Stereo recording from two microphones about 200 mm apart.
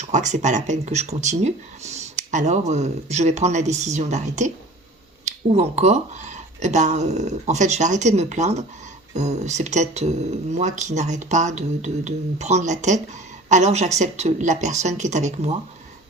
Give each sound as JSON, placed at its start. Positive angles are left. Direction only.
{"t": 0.0, "sound": "speech", "side_deg": -35}